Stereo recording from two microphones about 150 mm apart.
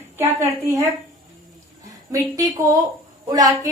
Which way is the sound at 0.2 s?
20° right (ahead or behind).